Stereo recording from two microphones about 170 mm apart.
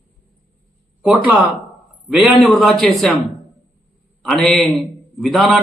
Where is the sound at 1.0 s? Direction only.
5° right (ahead or behind).